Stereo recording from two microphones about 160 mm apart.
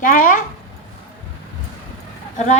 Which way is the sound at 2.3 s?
45° left (ahead or behind).